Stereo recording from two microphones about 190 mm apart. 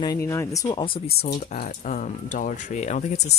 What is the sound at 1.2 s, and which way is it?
Speech, 50° left (ahead or behind).